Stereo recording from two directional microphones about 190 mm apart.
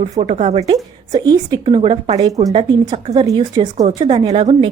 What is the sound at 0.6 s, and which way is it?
A woman's voice, 20° right (ahead or behind).